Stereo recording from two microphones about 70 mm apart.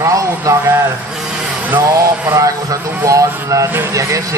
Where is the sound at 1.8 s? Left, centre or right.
Right.